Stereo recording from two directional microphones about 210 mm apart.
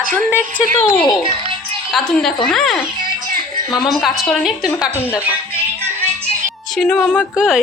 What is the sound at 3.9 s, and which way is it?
Speech, centre (ahead or behind).